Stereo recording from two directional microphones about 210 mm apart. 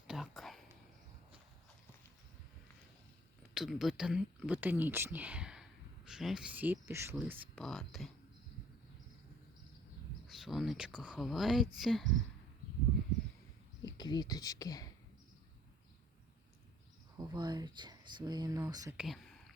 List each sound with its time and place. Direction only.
0.1 s whispering: centre (ahead or behind)
3.5 s speech: centre (ahead or behind)
10.2 s speech: centre (ahead or behind)
13.8 s speech: 20° left (ahead or behind)
17.2 s speech: 20° right (ahead or behind)
18.9 s whispering: centre (ahead or behind)